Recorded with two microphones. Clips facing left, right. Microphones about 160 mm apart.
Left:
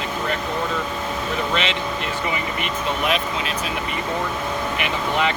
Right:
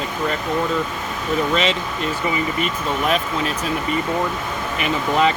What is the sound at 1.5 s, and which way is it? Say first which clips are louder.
Speech: right 3 dB; 40° right (ahead or behind).